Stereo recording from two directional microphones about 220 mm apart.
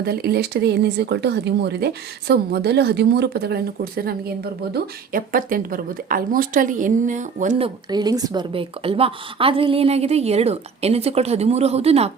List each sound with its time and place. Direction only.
0.0 s a woman's voice: 45° right (ahead or behind)
7.9 s a woman's voice: 20° right (ahead or behind)